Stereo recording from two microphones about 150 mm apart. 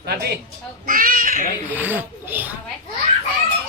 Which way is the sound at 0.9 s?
70° right (ahead or behind).